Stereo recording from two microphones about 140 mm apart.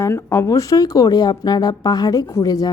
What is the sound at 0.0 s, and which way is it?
A woman's voice, 20° left (ahead or behind).